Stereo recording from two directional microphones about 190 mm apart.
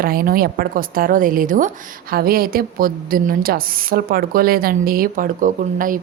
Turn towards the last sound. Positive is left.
turn(degrees=-45)  # may be behind; listen again after turning